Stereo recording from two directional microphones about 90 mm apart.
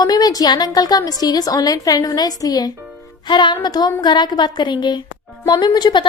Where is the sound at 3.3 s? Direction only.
60° left (ahead or behind).